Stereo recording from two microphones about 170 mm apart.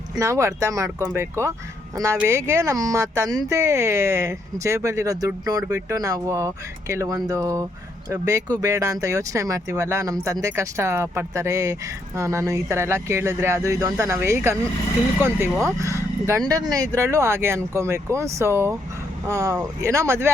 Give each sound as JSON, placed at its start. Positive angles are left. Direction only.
{"t": 0.2, "sound": "speech", "side_deg": -15}
{"t": 15.6, "sound": "speech", "side_deg": -20}